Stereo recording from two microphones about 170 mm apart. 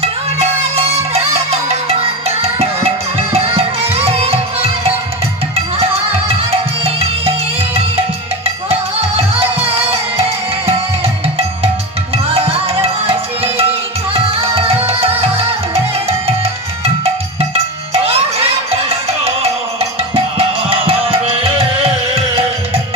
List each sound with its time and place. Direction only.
1.1 s music: 35° right (ahead or behind)
6.8 s music: 35° right (ahead or behind)
9.6 s music: 35° right (ahead or behind)
12.1 s music: 35° right (ahead or behind)